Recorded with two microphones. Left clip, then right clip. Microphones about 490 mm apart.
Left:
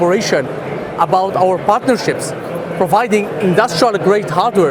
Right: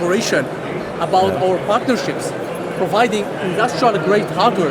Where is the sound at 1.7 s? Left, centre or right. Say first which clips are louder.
Left 4 dB; left.